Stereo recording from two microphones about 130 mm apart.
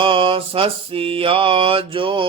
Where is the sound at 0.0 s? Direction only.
40° right (ahead or behind).